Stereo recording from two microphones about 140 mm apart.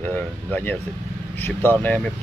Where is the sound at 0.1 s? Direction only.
15° left (ahead or behind).